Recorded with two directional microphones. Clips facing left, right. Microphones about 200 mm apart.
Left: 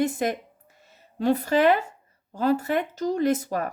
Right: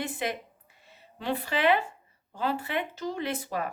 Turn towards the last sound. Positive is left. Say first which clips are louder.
# left 8 dB
turn(degrees=45)  # may be behind; listen again after turning